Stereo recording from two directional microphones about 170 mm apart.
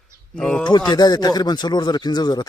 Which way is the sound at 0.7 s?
25° left (ahead or behind).